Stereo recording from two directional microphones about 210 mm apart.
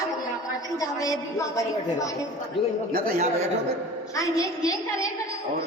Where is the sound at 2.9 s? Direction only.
45° right (ahead or behind).